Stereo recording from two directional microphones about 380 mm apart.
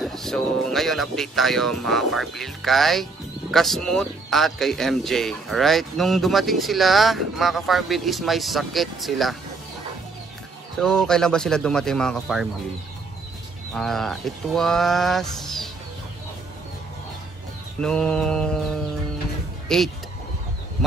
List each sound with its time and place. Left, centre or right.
0.0 s speech: centre
10.8 s speech: centre
13.7 s speech: centre
17.7 s speech: centre